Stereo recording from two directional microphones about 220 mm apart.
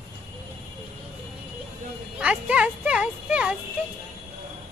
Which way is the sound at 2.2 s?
5° right (ahead or behind).